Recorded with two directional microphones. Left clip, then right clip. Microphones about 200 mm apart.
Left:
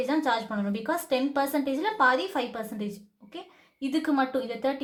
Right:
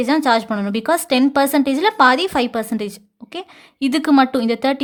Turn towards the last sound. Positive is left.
turn(degrees=-50)  # may be behind; listen again after turning